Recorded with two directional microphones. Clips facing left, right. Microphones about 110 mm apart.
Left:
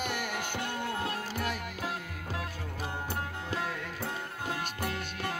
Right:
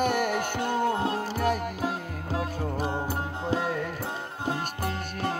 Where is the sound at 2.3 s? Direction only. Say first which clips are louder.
Right 9 dB; 30° right (ahead or behind).